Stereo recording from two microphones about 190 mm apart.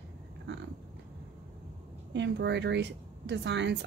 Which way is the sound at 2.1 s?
65° right (ahead or behind).